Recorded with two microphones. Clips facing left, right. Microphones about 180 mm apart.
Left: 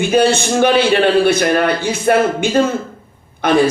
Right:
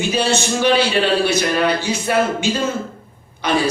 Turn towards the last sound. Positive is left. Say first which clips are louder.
# left 5 dB
turn(degrees=55)  # may be behind; listen again after turning